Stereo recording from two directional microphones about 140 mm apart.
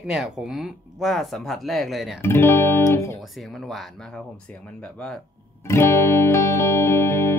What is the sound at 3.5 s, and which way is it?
Speech, centre (ahead or behind).